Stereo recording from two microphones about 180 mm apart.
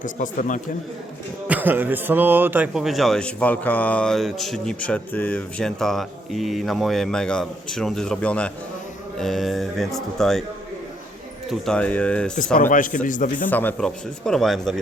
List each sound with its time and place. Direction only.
0.0 s speech: 45° left (ahead or behind)
1.5 s speech: 10° right (ahead or behind)
11.6 s speech: 5° left (ahead or behind)
12.5 s speech: 50° left (ahead or behind)
13.5 s speech: 10° left (ahead or behind)